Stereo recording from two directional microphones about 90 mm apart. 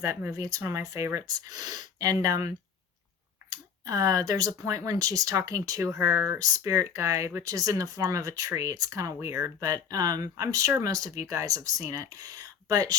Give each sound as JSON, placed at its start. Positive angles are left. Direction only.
{"t": 0.0, "sound": "speech", "side_deg": -35}
{"t": 3.5, "sound": "speech", "side_deg": -40}